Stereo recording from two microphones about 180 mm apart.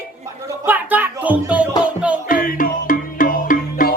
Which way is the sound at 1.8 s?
5° right (ahead or behind).